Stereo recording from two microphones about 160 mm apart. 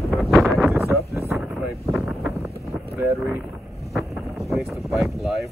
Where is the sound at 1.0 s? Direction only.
20° right (ahead or behind).